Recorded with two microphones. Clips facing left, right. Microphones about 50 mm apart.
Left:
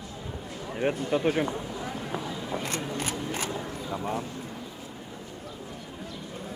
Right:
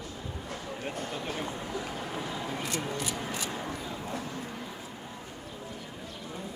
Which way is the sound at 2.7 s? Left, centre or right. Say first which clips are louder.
Left 2 dB; left.